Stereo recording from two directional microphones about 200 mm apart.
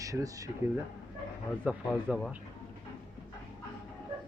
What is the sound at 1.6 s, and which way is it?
Speech, 5° right (ahead or behind).